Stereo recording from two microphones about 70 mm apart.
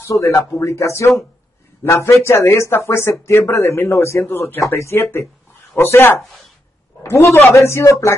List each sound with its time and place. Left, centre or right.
0.0 s speech: left